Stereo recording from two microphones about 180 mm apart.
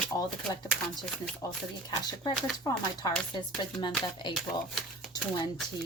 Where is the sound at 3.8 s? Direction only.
25° left (ahead or behind).